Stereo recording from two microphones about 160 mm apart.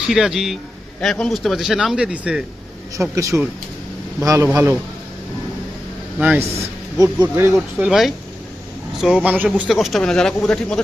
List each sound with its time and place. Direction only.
0.1 s speech: centre (ahead or behind)
3.0 s a man's voice: 20° right (ahead or behind)
6.1 s a man's voice: 10° right (ahead or behind)
7.8 s speech: centre (ahead or behind)